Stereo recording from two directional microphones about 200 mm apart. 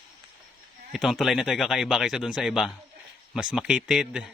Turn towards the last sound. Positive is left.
turn(degrees=-5)  # may be behind; listen again after turning